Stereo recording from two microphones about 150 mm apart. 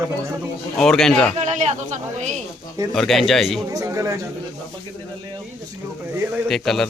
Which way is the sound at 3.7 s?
20° right (ahead or behind).